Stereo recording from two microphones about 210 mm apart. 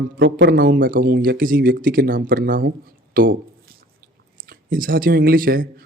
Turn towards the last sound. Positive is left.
turn(degrees=-45)  # may be behind; listen again after turning